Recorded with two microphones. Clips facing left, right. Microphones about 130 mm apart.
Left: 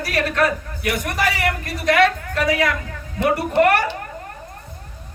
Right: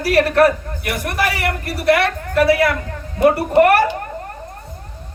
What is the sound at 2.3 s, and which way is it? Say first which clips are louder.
A woman's voice: right 5 dB; 35° right (ahead or behind).